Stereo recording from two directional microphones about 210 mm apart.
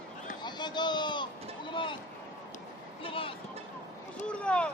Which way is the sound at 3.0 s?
25° left (ahead or behind).